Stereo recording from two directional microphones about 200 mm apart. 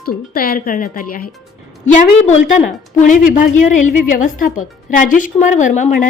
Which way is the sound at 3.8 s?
40° left (ahead or behind).